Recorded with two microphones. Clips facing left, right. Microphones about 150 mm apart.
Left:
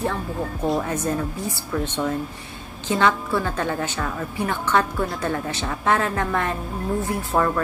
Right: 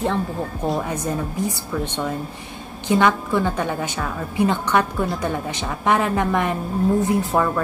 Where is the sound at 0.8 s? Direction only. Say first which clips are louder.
Even; 15° right (ahead or behind).